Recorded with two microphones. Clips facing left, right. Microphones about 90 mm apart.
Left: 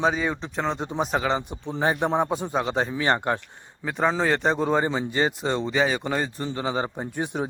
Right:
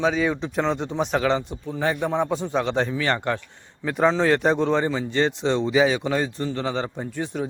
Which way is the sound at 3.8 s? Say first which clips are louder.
Right 3 dB; 5° left (ahead or behind).